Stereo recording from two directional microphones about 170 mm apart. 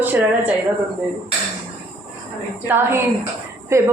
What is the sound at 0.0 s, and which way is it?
Speech, 10° right (ahead or behind).